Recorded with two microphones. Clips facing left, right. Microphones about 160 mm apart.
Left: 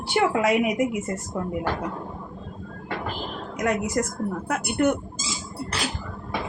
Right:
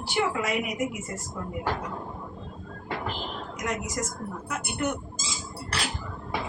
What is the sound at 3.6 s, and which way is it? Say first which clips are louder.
A woman's voice: left 8 dB; 60° left (ahead or behind).